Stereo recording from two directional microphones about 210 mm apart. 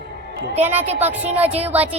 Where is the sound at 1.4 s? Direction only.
30° right (ahead or behind).